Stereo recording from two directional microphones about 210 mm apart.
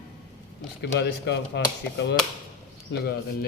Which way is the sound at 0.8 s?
55° left (ahead or behind).